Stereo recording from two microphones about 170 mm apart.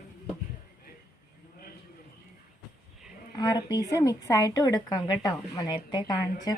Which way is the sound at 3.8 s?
20° left (ahead or behind).